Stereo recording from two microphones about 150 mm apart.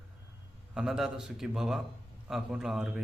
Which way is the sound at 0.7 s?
5° right (ahead or behind).